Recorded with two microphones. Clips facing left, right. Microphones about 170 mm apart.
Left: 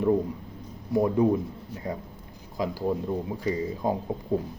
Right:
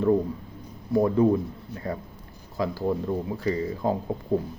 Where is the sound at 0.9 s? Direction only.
15° left (ahead or behind).